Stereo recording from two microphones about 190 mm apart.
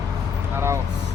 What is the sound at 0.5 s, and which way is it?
Speech, 15° right (ahead or behind).